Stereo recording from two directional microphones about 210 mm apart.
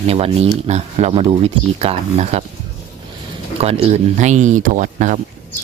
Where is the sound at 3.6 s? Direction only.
30° right (ahead or behind).